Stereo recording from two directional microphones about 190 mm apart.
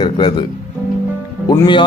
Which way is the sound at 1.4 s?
20° left (ahead or behind).